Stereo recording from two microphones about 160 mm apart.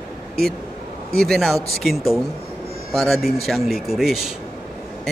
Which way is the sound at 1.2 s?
Centre (ahead or behind).